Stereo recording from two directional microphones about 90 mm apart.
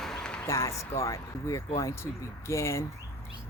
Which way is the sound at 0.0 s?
5° left (ahead or behind).